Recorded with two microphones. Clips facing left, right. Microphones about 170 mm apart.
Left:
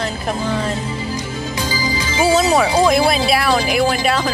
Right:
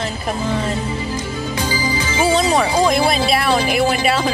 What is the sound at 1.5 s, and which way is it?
Music, 55° right (ahead or behind).